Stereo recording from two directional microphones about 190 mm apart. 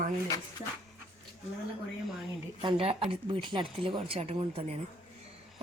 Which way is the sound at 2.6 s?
25° right (ahead or behind).